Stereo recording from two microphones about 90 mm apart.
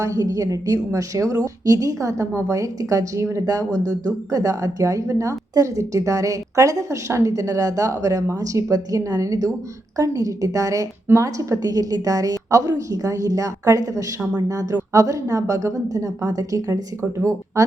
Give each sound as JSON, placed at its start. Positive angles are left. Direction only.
{"t": 0.0, "sound": "a woman's voice", "side_deg": -35}